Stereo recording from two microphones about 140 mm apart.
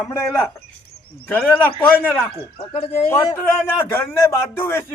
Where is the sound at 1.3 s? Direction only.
15° left (ahead or behind).